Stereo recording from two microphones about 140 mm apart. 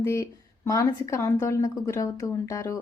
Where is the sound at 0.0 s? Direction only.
20° left (ahead or behind).